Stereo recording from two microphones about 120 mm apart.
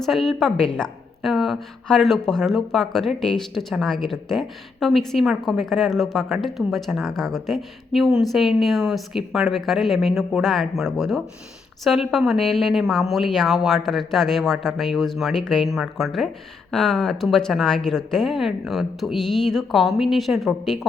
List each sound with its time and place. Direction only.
0.0 s a woman's voice: centre (ahead or behind)